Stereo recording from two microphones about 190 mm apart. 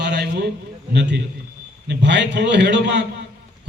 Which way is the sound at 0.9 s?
65° right (ahead or behind).